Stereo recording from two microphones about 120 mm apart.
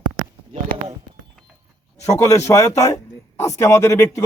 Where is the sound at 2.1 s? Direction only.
25° left (ahead or behind).